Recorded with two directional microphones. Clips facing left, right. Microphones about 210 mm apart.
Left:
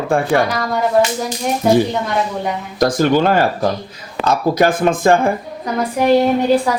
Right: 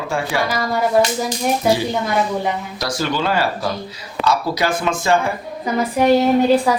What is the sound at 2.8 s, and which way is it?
Speech, 50° left (ahead or behind).